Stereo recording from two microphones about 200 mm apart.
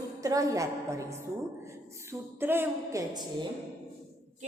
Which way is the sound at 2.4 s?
10° right (ahead or behind).